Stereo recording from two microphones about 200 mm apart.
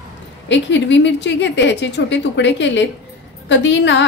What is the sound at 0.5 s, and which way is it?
A woman's voice, 65° left (ahead or behind).